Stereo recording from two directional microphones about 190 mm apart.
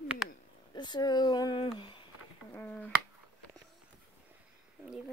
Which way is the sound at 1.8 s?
25° left (ahead or behind).